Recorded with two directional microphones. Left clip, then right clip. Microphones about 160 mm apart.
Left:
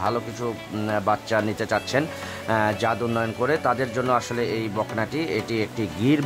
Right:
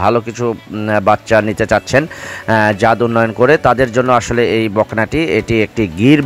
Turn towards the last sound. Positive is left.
turn(degrees=-40)  # may be behind; listen again after turning